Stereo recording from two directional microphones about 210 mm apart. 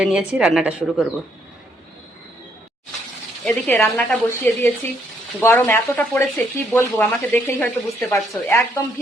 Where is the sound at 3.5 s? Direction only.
5° left (ahead or behind).